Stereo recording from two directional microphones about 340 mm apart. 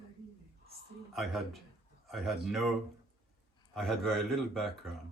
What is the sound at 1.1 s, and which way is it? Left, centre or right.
A man's voice, centre.